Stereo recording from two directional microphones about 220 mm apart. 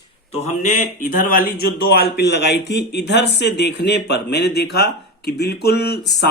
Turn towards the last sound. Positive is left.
turn(degrees=50)  # may be behind; listen again after turning